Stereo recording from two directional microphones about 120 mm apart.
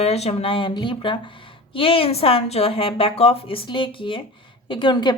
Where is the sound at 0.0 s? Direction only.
60° left (ahead or behind).